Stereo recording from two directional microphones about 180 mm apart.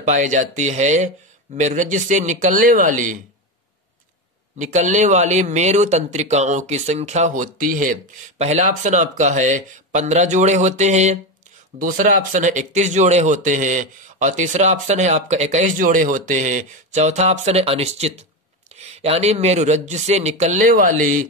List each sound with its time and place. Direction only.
0.0 s speech: 40° right (ahead or behind)
4.6 s speech: 40° right (ahead or behind)